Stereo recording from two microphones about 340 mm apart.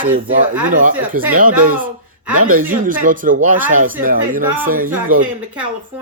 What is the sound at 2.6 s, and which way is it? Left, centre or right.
Speech, right.